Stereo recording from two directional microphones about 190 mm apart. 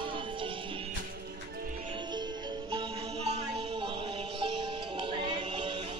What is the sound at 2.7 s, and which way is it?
Music, 30° right (ahead or behind).